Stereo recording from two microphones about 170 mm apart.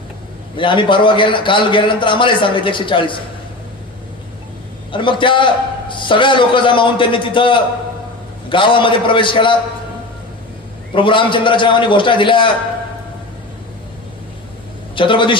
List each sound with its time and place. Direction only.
0.5 s a man's voice: 30° left (ahead or behind)
4.9 s a man's voice: 30° left (ahead or behind)
10.9 s a man's voice: 30° left (ahead or behind)
14.9 s a man's voice: 30° left (ahead or behind)